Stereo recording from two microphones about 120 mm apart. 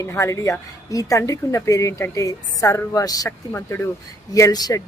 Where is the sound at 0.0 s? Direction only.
25° left (ahead or behind).